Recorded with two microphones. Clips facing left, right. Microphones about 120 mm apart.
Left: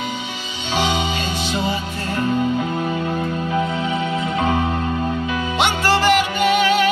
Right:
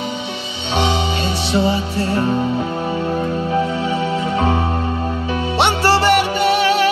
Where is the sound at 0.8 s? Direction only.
35° right (ahead or behind).